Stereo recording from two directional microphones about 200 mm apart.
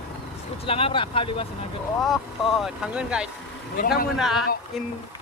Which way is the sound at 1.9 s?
Centre (ahead or behind).